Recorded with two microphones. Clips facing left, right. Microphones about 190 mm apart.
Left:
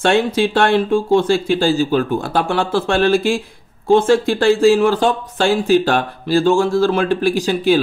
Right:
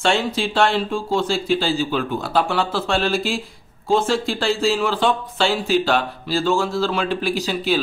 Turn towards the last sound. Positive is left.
turn(degrees=50)  # may be behind; listen again after turning